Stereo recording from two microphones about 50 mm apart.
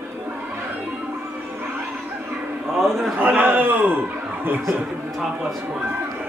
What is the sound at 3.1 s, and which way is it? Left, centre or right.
Speech, right.